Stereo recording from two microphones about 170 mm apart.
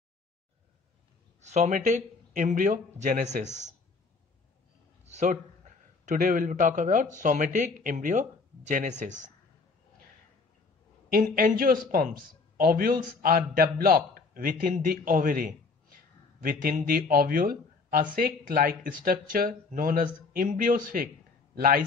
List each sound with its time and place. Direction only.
1.4 s speech: 45° right (ahead or behind)
5.0 s a sound: 45° right (ahead or behind)
6.0 s speech: 50° right (ahead or behind)
11.1 s a man's voice: 60° right (ahead or behind)